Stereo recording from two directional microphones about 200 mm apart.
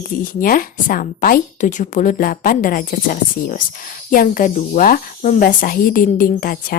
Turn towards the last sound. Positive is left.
turn(degrees=45)  # may be behind; listen again after turning